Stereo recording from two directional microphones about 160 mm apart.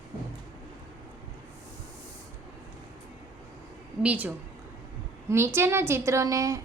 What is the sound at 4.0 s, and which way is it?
A woman's voice, 10° right (ahead or behind).